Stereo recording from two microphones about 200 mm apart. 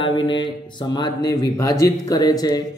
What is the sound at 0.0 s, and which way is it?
Speech, 25° left (ahead or behind).